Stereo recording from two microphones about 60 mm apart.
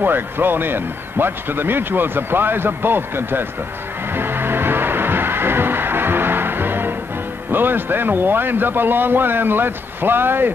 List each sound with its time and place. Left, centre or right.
0.0 s a man's voice: right
4.2 s music: right
7.5 s a man's voice: right